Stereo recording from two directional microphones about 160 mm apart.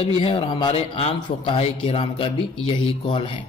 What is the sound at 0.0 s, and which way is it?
A man's voice, 35° left (ahead or behind).